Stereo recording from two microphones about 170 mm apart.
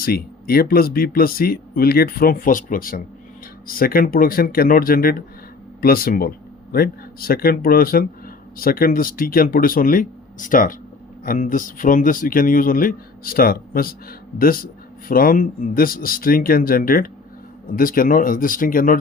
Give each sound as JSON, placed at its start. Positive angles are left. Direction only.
{"t": 0.0, "sound": "speech", "side_deg": 65}